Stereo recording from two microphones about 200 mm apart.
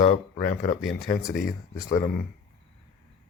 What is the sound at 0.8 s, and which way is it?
Speech, centre (ahead or behind).